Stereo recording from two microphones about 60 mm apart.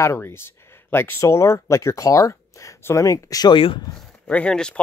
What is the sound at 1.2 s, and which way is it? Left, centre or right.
Speech, left.